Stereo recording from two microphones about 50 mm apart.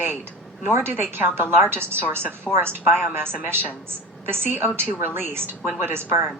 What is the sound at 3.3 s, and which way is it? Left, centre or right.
A woman's voice, right.